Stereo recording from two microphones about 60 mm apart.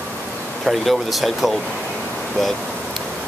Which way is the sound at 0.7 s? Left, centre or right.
Centre.